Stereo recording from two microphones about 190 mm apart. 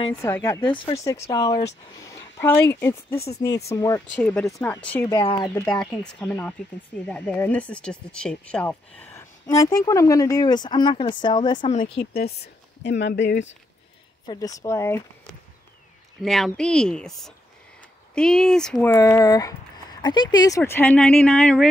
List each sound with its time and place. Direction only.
0.2 s speech: 15° left (ahead or behind)
5.1 s speech: 25° left (ahead or behind)
5.5 s speech: 5° left (ahead or behind); by 11.7 s 25° left (ahead or behind)
12.1 s speech: 55° left (ahead or behind)
14.2 s speech: 20° left (ahead or behind)
16.2 s speech: centre (ahead or behind)